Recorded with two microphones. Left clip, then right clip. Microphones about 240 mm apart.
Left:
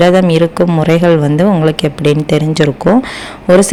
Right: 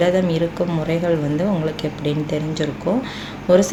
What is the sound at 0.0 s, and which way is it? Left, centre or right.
A woman's voice, left.